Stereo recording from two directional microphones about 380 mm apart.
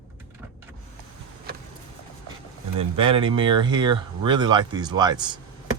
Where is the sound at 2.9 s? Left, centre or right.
Centre.